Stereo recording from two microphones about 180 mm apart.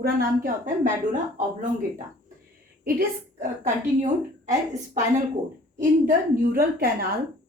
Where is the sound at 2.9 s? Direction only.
55° right (ahead or behind).